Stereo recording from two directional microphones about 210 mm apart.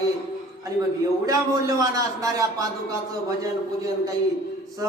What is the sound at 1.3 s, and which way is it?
A man's voice, 15° right (ahead or behind).